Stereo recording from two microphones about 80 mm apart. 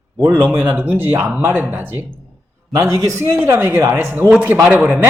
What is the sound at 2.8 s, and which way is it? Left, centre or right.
Speech, right.